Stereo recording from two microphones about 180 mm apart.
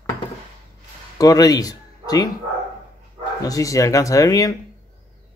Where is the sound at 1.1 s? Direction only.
20° left (ahead or behind).